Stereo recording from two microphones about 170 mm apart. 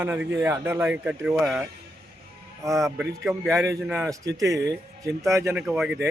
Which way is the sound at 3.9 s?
15° right (ahead or behind).